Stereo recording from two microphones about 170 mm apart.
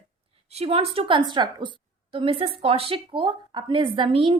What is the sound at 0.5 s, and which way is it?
A woman's voice, 35° right (ahead or behind).